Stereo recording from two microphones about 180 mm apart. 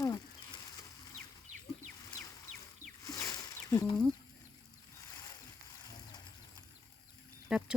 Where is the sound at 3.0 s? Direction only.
20° left (ahead or behind).